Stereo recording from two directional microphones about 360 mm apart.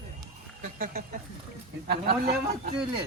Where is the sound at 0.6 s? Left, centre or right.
Right.